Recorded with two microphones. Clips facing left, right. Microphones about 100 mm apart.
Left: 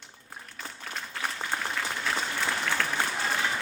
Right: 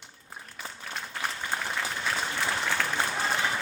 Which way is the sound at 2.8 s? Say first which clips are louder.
Even; 5° right (ahead or behind).